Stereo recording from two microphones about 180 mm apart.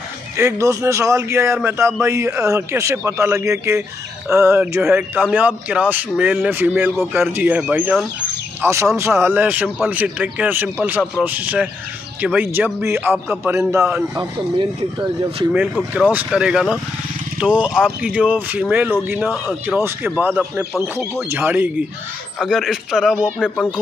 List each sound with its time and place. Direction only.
0.4 s a man's voice: 15° right (ahead or behind)
8.5 s a man's voice: 15° right (ahead or behind)
14.6 s speech: 25° right (ahead or behind)
15.5 s a man's voice: 5° right (ahead or behind)